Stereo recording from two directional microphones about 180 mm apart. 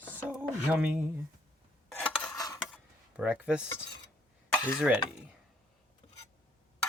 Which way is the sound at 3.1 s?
10° right (ahead or behind).